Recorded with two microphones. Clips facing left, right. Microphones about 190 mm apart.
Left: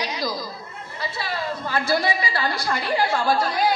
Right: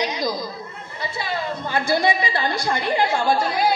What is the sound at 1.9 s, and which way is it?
A man's voice, 20° right (ahead or behind).